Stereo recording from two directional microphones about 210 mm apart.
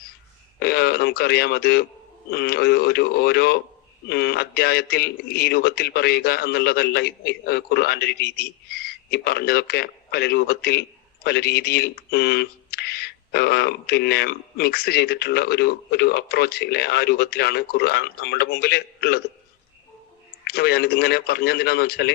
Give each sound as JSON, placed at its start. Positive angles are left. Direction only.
{"t": 0.6, "sound": "a man's voice", "side_deg": 50}
{"t": 20.4, "sound": "a man's voice", "side_deg": 50}